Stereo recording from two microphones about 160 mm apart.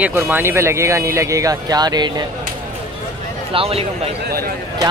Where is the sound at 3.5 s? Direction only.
35° right (ahead or behind).